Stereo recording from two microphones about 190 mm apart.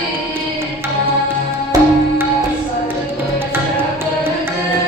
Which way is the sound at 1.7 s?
20° right (ahead or behind).